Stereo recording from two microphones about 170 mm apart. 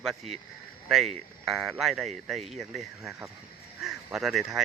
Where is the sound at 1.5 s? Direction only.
Centre (ahead or behind).